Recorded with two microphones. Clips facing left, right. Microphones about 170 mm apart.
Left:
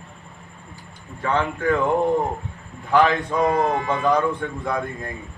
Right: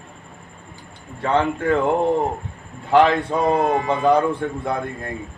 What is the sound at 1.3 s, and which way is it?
Speech, 25° right (ahead or behind).